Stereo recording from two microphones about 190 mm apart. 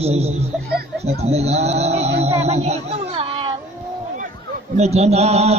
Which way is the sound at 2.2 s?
35° right (ahead or behind).